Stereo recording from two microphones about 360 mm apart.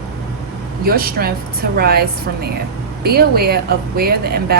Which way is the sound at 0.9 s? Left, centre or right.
Right.